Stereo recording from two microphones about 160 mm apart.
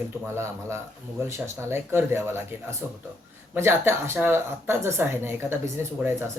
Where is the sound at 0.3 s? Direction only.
15° right (ahead or behind).